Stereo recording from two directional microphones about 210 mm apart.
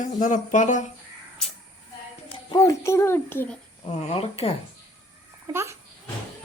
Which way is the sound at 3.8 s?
30° left (ahead or behind).